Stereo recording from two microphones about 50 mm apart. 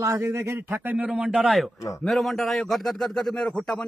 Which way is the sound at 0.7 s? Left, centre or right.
Right.